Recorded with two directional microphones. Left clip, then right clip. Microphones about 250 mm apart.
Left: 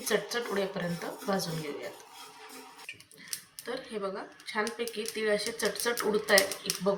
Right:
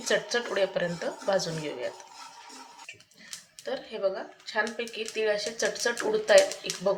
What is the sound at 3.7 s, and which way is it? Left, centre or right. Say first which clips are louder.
Speech: right 6 dB; right.